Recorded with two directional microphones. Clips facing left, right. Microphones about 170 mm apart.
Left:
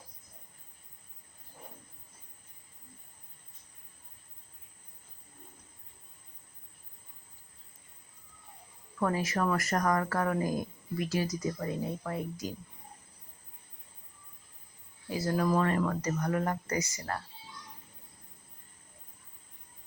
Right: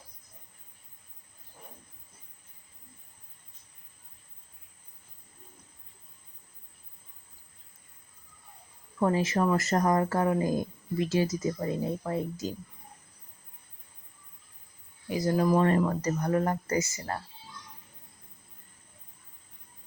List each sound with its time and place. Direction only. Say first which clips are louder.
9.0 s speech: right 4 dB; 25° right (ahead or behind)
15.1 s speech: right 4 dB; 20° right (ahead or behind)